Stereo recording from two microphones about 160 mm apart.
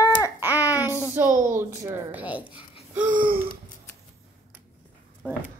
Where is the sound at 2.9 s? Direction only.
50° right (ahead or behind).